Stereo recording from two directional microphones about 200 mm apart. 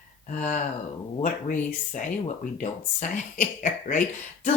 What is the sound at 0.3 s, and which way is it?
Speech, 35° left (ahead or behind).